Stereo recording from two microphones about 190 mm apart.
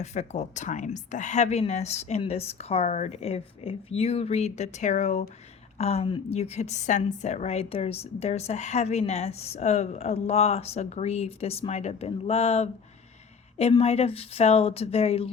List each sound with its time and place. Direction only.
0.0 s a woman's voice: 35° left (ahead or behind)